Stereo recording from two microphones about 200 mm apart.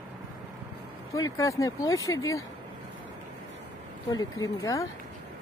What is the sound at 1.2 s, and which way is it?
Speech, 15° left (ahead or behind).